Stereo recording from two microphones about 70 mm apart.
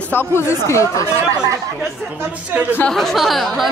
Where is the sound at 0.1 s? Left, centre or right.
Left.